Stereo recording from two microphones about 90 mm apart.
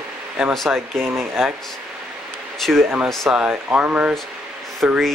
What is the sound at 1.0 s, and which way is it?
Speech, 30° right (ahead or behind).